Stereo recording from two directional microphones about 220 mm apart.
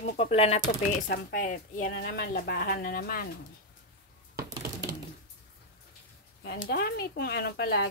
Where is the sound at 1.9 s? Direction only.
50° left (ahead or behind).